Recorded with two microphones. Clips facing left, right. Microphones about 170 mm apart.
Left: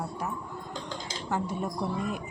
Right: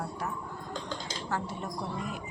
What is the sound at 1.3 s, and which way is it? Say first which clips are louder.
Speech: left 5 dB; 15° left (ahead or behind).